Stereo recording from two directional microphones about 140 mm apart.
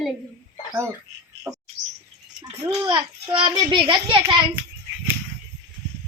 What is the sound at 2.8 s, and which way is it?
A child's voice, 30° right (ahead or behind).